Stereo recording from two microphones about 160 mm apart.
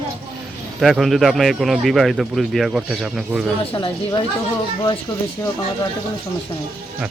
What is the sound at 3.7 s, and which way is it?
Speech, 30° left (ahead or behind).